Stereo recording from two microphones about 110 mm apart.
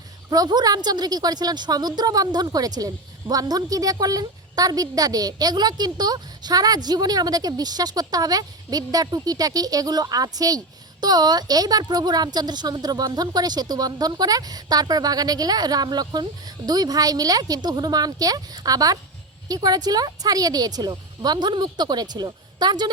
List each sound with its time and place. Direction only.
0.3 s a woman's voice: 35° right (ahead or behind)